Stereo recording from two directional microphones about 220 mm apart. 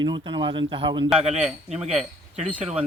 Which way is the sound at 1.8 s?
25° right (ahead or behind).